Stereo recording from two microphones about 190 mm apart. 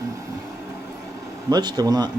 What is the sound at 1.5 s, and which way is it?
Speech, 20° right (ahead or behind).